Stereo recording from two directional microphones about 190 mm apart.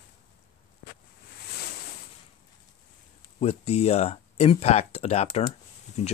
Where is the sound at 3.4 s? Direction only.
35° left (ahead or behind).